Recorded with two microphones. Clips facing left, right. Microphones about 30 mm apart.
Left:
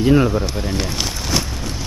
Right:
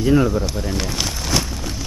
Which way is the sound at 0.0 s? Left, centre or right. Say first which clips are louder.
Left 2 dB; left.